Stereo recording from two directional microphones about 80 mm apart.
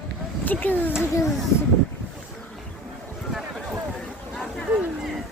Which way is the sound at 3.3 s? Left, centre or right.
Centre.